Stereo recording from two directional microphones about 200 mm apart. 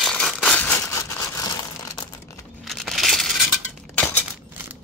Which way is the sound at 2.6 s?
Centre (ahead or behind).